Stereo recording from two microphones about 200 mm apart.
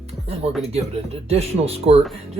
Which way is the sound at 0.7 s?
30° right (ahead or behind).